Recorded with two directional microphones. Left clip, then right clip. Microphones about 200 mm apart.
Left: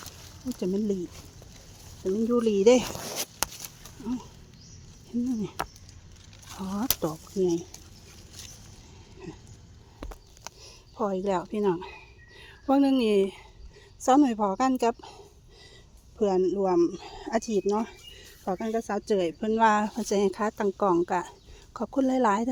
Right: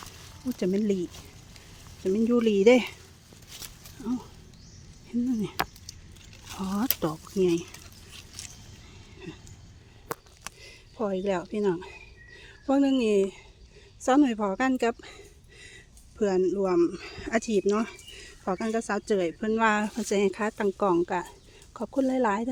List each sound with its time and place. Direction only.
0.6 s speech: 15° right (ahead or behind)
2.1 s speech: 15° right (ahead or behind)
4.0 s speech: 5° right (ahead or behind)
5.3 s speech: 5° right (ahead or behind)
9.2 s a sound: centre (ahead or behind)
10.6 s a sound: centre (ahead or behind)
11.5 s speech: centre (ahead or behind)
16.2 s speech: 5° right (ahead or behind)